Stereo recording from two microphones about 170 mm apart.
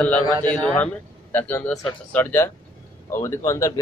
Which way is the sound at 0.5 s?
10° left (ahead or behind).